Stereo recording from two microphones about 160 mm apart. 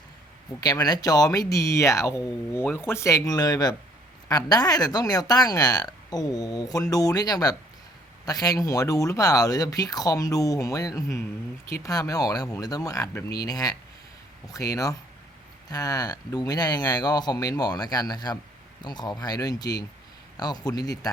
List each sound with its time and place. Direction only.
0.6 s speech: 25° left (ahead or behind)